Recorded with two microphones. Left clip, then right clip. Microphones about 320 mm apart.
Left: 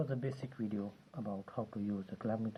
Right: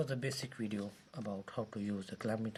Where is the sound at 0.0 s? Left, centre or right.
Right.